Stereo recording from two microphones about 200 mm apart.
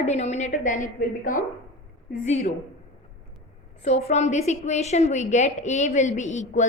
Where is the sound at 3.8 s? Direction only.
35° left (ahead or behind).